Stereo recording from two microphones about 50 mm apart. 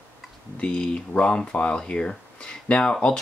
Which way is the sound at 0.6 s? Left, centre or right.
Left.